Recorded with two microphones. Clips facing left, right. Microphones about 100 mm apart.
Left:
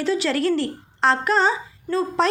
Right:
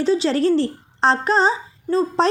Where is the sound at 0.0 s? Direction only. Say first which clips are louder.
Right 4 dB; 25° right (ahead or behind).